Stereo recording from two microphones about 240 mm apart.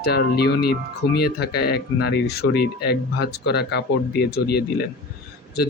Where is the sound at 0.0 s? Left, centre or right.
Left.